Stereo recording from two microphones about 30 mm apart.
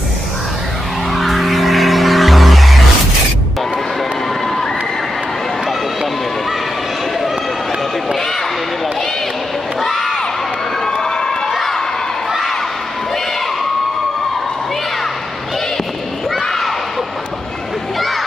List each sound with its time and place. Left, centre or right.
1.1 s music: centre
9.8 s crowd: centre
10.9 s cheering: left
16.3 s a sound: centre